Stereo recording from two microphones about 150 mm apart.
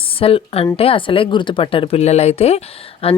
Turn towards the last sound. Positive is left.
turn(degrees=40)  # may be behind; listen again after turning